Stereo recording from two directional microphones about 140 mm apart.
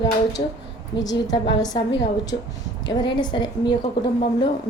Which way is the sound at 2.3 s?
50° left (ahead or behind).